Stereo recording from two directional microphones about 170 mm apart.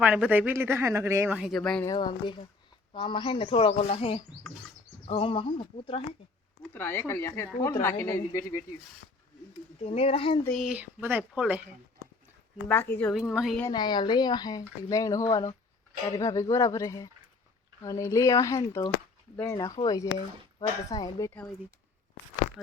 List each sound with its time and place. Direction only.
0.0 s speech: 10° right (ahead or behind)
1.3 s speech: 5° right (ahead or behind)
1.8 s a woman's voice: 25° left (ahead or behind)
6.6 s speech: 10° left (ahead or behind)
9.8 s a woman's voice: 35° left (ahead or behind)
10.4 s speech: centre (ahead or behind)
12.6 s speech: 10° left (ahead or behind)
13.1 s speech: 5° right (ahead or behind)
13.6 s speech: 25° left (ahead or behind)
22.6 s speech: centre (ahead or behind)